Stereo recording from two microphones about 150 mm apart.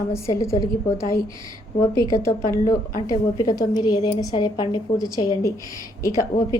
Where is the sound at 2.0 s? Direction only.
20° left (ahead or behind).